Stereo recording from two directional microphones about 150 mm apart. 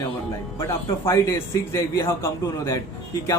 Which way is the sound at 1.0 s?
20° left (ahead or behind).